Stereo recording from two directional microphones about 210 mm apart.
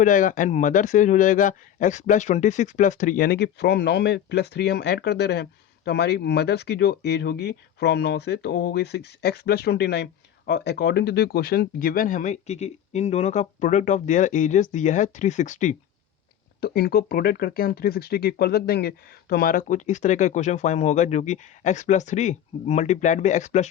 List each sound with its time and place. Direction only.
0.0 s speech: 40° left (ahead or behind)
16.6 s speech: 50° left (ahead or behind)